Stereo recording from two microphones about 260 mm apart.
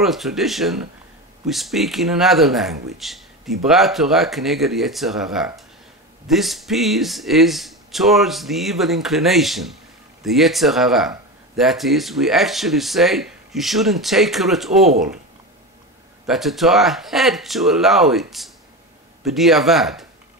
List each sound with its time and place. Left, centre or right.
0.0 s speech: centre
16.3 s speech: centre
19.2 s speech: centre